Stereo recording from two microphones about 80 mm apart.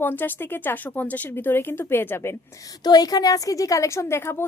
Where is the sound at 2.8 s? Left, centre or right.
Left.